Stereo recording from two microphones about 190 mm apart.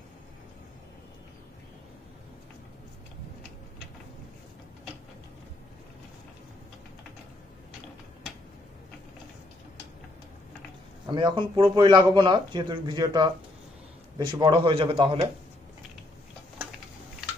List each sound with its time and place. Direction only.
11.1 s speech: 25° right (ahead or behind)